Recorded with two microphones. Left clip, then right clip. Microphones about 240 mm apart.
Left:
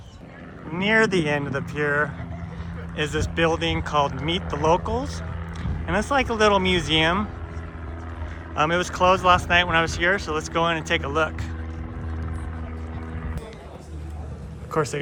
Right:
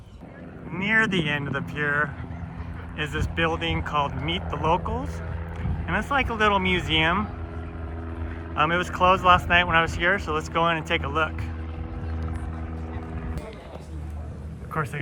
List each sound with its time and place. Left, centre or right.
0.7 s speech: centre
1.5 s speech: centre
8.5 s speech: centre
14.7 s speech: centre